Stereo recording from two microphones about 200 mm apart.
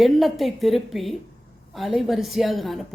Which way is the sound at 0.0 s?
Centre (ahead or behind).